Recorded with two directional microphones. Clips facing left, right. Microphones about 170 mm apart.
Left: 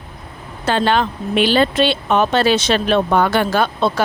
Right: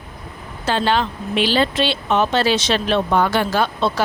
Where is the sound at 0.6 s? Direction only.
55° left (ahead or behind).